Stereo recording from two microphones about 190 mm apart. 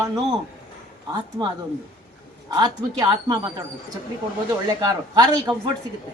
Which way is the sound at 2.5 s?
20° right (ahead or behind).